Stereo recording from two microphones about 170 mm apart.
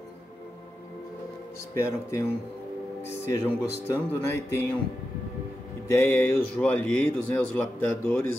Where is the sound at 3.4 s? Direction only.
15° left (ahead or behind).